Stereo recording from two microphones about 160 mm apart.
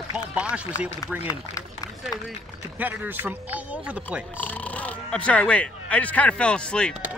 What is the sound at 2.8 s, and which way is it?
Speech, 10° right (ahead or behind).